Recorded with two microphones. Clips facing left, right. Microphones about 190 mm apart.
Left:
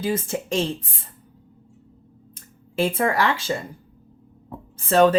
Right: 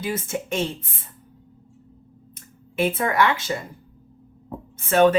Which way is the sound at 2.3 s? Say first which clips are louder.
Left 1 dB; 30° left (ahead or behind).